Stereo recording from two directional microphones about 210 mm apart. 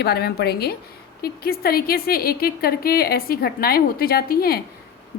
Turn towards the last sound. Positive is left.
turn(degrees=45)  # may be behind; listen again after turning